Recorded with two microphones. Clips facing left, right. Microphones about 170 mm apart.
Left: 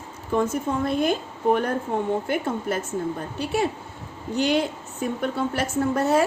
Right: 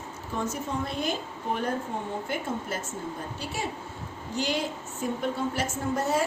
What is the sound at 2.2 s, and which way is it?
A woman's voice, 60° left (ahead or behind).